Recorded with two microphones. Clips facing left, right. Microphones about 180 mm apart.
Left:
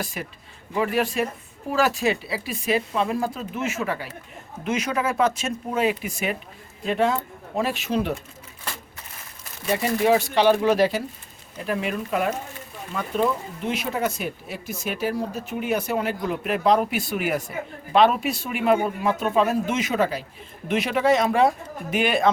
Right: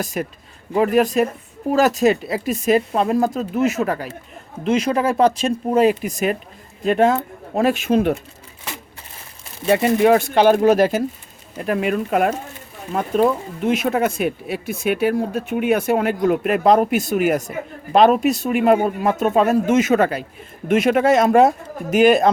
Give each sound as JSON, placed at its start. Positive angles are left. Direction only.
{"t": 0.0, "sound": "speech", "side_deg": -45}
{"t": 4.6, "sound": "speech", "side_deg": -30}
{"t": 6.8, "sound": "speech", "side_deg": -55}
{"t": 9.6, "sound": "speech", "side_deg": -65}